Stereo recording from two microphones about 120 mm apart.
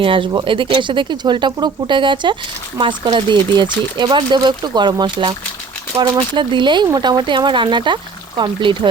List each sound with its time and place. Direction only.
0.0 s speech: 45° right (ahead or behind)